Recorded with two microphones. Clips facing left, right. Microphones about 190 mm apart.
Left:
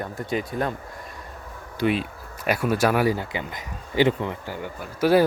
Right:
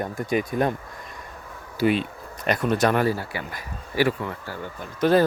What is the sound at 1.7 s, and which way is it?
Speech, centre (ahead or behind).